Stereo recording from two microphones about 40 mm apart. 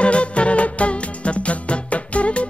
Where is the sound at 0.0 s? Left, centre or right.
Left.